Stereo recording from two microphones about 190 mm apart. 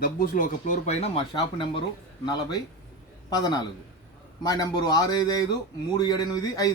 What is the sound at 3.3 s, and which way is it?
A man's voice, 20° left (ahead or behind).